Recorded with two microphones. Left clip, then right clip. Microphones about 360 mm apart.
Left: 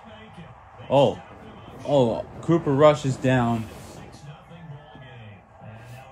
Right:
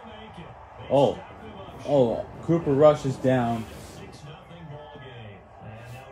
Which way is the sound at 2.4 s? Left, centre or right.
Centre.